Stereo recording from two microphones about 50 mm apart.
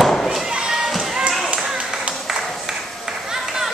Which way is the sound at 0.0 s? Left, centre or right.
Centre.